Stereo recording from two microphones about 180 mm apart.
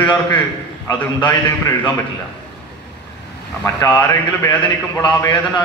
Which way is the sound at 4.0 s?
15° left (ahead or behind).